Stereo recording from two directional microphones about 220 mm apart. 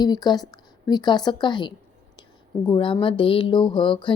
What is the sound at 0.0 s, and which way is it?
Speech, 20° left (ahead or behind).